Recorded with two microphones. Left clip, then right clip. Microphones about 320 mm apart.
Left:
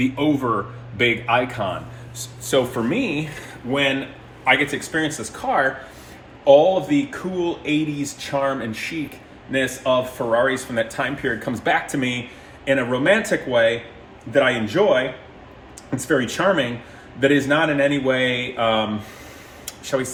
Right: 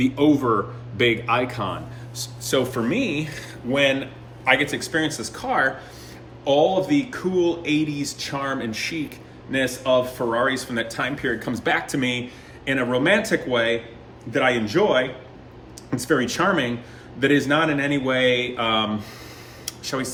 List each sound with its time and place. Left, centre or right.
0.0 s a man's voice: centre
16.0 s a man's voice: centre
19.9 s a man's voice: centre